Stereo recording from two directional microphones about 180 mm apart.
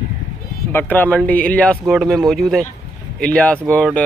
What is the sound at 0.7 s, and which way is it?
Speech, 10° left (ahead or behind).